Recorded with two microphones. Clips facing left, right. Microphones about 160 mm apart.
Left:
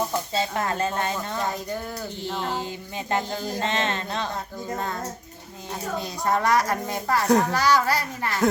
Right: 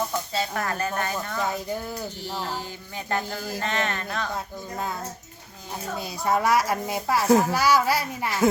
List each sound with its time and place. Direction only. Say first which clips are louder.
0.3 s speech: left 2 dB; 25° left (ahead or behind)
6.0 s speech: right 1 dB; 5° right (ahead or behind)